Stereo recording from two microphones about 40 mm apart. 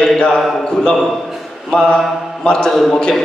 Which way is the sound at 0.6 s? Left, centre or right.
Centre.